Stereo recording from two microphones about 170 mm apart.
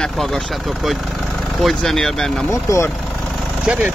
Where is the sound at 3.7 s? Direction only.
5° right (ahead or behind).